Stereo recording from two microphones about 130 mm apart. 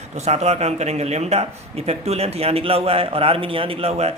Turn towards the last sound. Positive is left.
turn(degrees=-55)  # may be behind; listen again after turning